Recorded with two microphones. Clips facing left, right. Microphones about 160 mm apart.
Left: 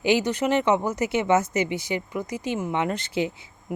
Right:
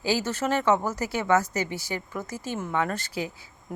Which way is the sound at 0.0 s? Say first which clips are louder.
Left 4 dB; 20° left (ahead or behind).